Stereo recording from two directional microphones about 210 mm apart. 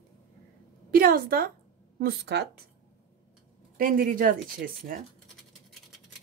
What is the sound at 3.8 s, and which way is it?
A woman's voice, 40° right (ahead or behind).